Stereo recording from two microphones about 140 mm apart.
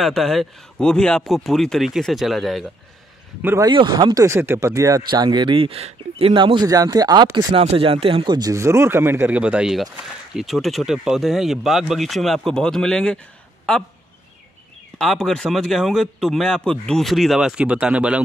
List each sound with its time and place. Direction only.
0.0 s speech: centre (ahead or behind)
3.6 s speech: 30° right (ahead or behind)
5.1 s speech: 35° right (ahead or behind)
7.6 s speech: 40° right (ahead or behind); by 13.2 s 5° left (ahead or behind)
15.0 s speech: 5° left (ahead or behind)